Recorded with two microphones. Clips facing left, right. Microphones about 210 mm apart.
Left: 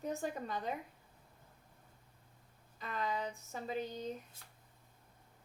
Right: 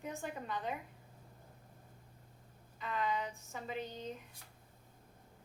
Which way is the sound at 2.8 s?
40° left (ahead or behind).